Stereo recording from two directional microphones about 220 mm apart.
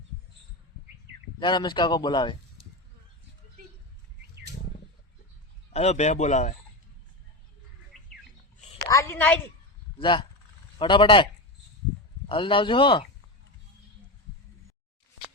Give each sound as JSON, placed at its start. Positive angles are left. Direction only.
{"t": 1.4, "sound": "speech", "side_deg": 20}
{"t": 5.7, "sound": "speech", "side_deg": 30}
{"t": 7.9, "sound": "bird", "side_deg": 0}
{"t": 8.8, "sound": "a woman's voice", "side_deg": 15}
{"t": 10.0, "sound": "speech", "side_deg": 20}
{"t": 12.3, "sound": "speech", "side_deg": 25}